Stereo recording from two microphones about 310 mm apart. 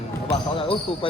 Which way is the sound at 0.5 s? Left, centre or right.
Centre.